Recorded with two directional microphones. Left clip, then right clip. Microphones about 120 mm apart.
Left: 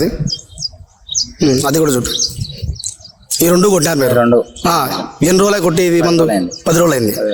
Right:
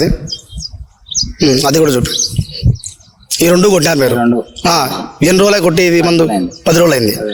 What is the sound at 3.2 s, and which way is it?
Speech, centre (ahead or behind).